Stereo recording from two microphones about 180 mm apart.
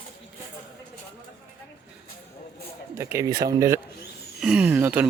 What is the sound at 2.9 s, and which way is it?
Speech, 15° right (ahead or behind).